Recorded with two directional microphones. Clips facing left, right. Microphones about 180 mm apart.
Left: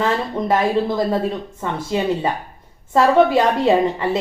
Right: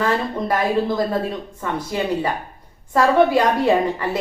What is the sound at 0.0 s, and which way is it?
Speech, 20° left (ahead or behind).